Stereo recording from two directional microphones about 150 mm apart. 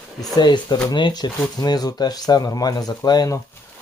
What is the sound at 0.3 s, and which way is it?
Speech, 30° left (ahead or behind).